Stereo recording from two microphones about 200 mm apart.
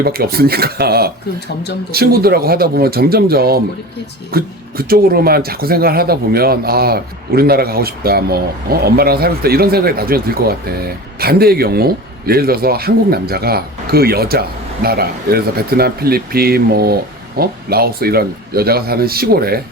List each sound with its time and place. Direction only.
0.0 s speech: 50° right (ahead or behind)